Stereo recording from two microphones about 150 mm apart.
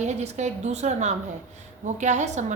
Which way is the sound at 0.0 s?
50° right (ahead or behind).